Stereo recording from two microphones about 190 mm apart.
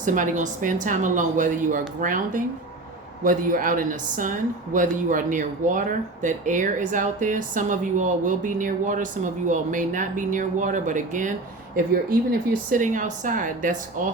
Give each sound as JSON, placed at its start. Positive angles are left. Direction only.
{"t": 0.0, "sound": "speech", "side_deg": -40}
{"t": 12.7, "sound": "speech", "side_deg": -40}